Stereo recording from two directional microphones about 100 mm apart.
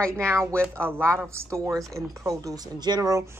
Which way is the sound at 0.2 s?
25° right (ahead or behind).